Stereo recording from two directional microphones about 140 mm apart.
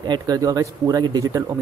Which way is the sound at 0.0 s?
30° right (ahead or behind).